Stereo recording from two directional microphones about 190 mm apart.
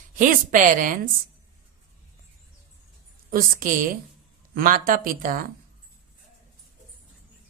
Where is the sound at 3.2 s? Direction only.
50° right (ahead or behind).